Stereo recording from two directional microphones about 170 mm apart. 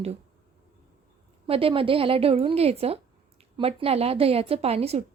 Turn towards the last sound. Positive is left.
turn(degrees=-35)  # may be behind; listen again after turning